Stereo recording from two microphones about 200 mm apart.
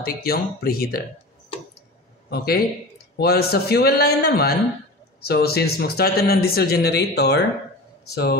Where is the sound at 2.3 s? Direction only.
50° left (ahead or behind).